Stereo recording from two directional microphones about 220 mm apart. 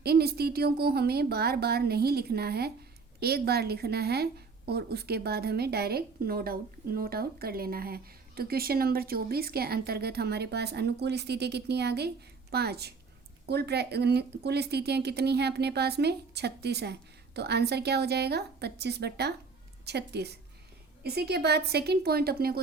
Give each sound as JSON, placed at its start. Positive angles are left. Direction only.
{"t": 0.0, "sound": "a woman's voice", "side_deg": -45}